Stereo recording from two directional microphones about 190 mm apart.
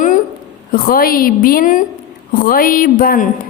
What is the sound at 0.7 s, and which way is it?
A woman's voice, 50° left (ahead or behind).